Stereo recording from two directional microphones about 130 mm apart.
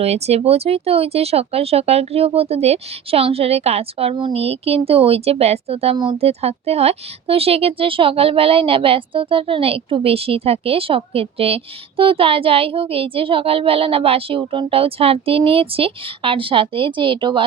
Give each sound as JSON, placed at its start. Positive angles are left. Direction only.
{"t": 0.0, "sound": "speech", "side_deg": -55}